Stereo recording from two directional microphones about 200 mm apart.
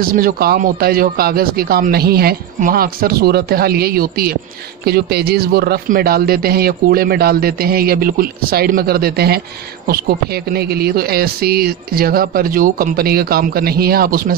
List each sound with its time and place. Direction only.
0.0 s a man's voice: 45° right (ahead or behind)